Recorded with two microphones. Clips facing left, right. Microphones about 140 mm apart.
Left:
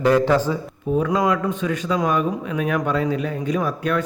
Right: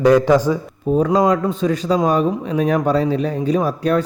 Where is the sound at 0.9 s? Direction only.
30° right (ahead or behind).